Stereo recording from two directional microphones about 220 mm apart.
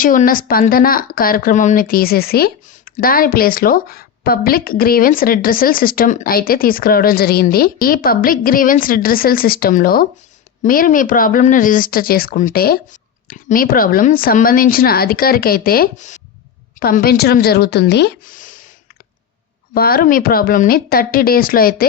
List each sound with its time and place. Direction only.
0.0 s a woman's voice: 40° left (ahead or behind)
19.7 s a woman's voice: 45° left (ahead or behind)